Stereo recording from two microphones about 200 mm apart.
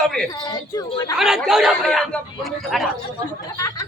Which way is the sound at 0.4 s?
20° left (ahead or behind).